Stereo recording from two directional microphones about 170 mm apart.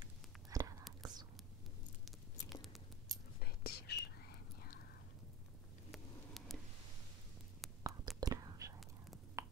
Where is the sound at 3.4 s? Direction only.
65° left (ahead or behind).